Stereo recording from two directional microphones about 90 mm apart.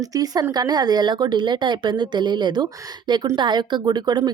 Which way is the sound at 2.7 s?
40° right (ahead or behind).